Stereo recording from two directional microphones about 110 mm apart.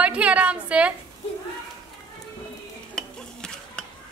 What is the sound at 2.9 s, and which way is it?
Stir, 5° left (ahead or behind).